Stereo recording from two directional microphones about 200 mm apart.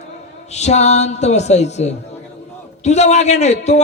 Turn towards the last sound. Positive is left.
turn(degrees=35)  # may be behind; listen again after turning